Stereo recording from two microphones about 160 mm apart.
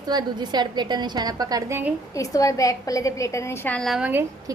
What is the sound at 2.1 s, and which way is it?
A woman's voice, 20° left (ahead or behind).